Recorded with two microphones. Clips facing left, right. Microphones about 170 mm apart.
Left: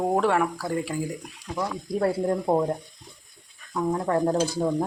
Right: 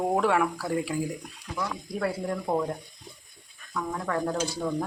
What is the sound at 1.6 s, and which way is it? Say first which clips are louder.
Speech: left 5 dB; 35° left (ahead or behind).